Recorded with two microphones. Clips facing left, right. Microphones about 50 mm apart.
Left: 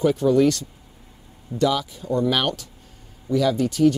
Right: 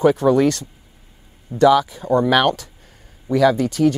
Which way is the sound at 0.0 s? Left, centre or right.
Right.